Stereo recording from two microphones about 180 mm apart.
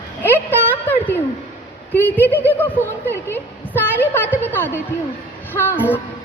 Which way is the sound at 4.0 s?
10° left (ahead or behind).